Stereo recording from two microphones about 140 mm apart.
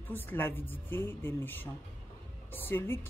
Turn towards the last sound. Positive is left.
turn(degrees=15)  # may be behind; listen again after turning